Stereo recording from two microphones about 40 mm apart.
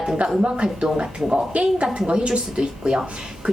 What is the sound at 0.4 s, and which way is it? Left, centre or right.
A woman's voice, right.